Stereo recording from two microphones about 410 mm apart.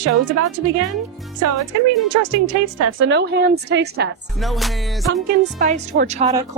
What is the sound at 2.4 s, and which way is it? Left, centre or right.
A woman's voice, right.